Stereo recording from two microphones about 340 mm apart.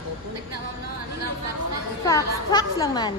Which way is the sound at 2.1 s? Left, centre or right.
Centre.